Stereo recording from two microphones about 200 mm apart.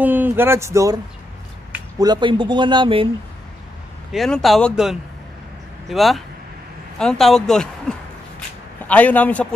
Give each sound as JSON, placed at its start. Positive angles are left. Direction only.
{"t": 0.0, "sound": "speech", "side_deg": -10}
{"t": 2.0, "sound": "a man's voice", "side_deg": -20}
{"t": 4.1, "sound": "speech", "side_deg": 0}
{"t": 8.8, "sound": "a man's voice", "side_deg": 5}